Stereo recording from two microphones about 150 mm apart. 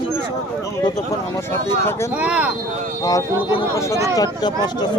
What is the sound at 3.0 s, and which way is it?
Speech, 25° left (ahead or behind).